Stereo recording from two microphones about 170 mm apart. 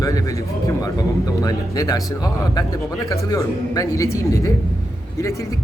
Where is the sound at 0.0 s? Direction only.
20° left (ahead or behind).